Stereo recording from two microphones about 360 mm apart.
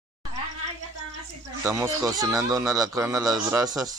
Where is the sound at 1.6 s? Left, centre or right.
Centre.